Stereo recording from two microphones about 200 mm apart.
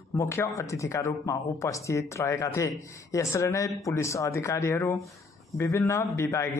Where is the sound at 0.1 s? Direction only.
15° left (ahead or behind).